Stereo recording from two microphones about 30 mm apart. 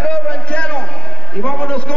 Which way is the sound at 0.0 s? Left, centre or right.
Left.